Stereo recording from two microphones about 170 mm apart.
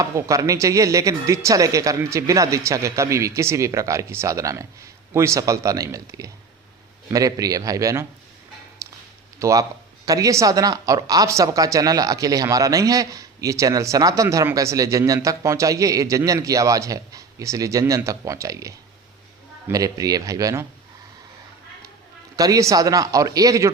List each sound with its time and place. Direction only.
0.0 s speech: 20° right (ahead or behind)
8.8 s a sound: 20° right (ahead or behind)
9.4 s speech: 20° right (ahead or behind)
22.4 s speech: 20° right (ahead or behind)